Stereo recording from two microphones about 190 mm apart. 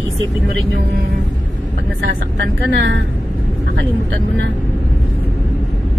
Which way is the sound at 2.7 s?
75° right (ahead or behind).